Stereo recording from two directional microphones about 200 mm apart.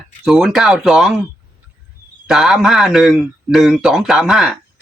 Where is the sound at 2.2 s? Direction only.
Centre (ahead or behind).